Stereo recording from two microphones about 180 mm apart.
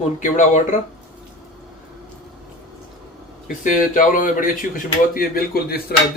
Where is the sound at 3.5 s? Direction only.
50° left (ahead or behind).